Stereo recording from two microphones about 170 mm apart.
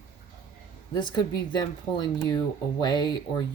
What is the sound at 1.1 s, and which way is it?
Speech, 25° left (ahead or behind).